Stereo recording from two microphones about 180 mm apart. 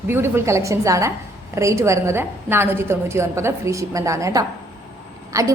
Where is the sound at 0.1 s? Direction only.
15° right (ahead or behind).